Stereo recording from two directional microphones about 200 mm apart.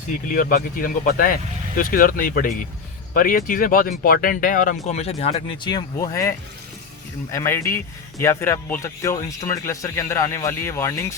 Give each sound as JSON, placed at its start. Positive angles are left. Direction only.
{"t": 0.3, "sound": "speech", "side_deg": 45}